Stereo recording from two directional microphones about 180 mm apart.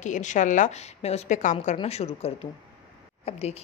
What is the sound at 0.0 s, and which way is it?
A woman's voice, 40° left (ahead or behind).